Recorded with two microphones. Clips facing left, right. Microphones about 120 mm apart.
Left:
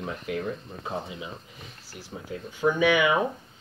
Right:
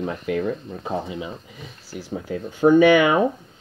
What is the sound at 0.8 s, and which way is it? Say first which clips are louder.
Speech: right 6 dB; 55° right (ahead or behind).